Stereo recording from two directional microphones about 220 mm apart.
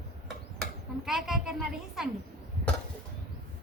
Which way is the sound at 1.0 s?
Centre (ahead or behind).